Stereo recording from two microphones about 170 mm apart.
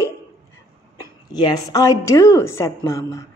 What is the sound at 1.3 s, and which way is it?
Speech, 25° left (ahead or behind).